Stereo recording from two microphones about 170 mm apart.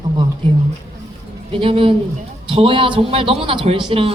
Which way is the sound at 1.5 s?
30° right (ahead or behind).